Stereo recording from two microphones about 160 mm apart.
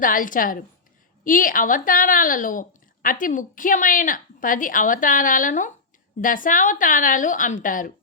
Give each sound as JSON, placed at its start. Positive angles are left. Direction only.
{"t": 0.0, "sound": "a woman's voice", "side_deg": 60}